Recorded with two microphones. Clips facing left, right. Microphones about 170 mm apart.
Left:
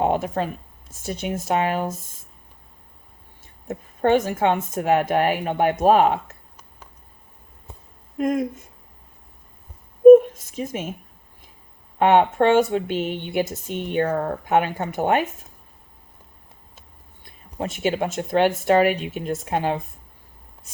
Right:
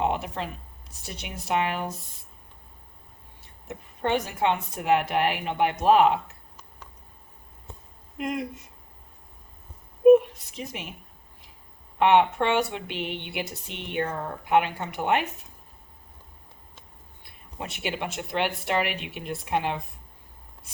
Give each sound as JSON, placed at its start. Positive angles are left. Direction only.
{"t": 0.0, "sound": "speech", "side_deg": 45}
{"t": 3.7, "sound": "speech", "side_deg": 45}
{"t": 8.2, "sound": "speech", "side_deg": 45}
{"t": 10.0, "sound": "a sound", "side_deg": 45}
{"t": 11.9, "sound": "speech", "side_deg": 45}
{"t": 17.6, "sound": "speech", "side_deg": 45}